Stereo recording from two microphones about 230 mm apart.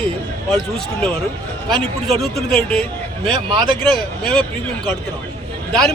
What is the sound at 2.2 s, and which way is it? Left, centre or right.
Speech, centre.